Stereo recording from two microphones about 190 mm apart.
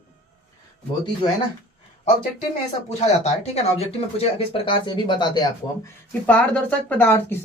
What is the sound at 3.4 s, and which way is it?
Speech, 35° left (ahead or behind).